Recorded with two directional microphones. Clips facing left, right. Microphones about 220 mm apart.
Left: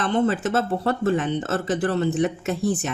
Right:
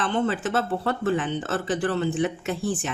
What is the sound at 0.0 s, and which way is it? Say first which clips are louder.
Speech: left 3 dB; 40° left (ahead or behind).